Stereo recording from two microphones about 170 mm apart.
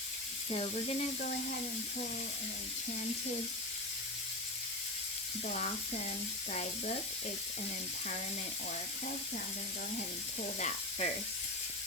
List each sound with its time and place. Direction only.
0.5 s speech: 35° left (ahead or behind)
5.5 s speech: 45° left (ahead or behind)
10.6 s speech: 45° left (ahead or behind)